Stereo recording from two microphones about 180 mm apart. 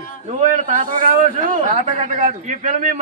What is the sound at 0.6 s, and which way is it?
A man's voice, 50° right (ahead or behind).